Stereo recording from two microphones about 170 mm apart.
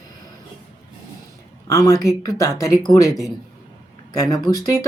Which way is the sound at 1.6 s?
20° left (ahead or behind).